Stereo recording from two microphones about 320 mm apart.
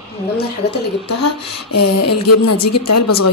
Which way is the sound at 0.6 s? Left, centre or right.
Left.